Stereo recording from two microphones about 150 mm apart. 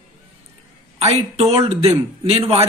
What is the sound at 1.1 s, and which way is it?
Speech, 45° right (ahead or behind).